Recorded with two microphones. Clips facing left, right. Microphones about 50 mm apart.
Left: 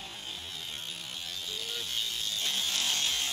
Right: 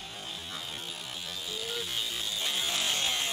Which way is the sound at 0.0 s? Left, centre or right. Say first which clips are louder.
Right 1 dB; centre.